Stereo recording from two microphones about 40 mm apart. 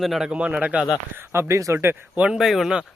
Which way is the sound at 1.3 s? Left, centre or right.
Right.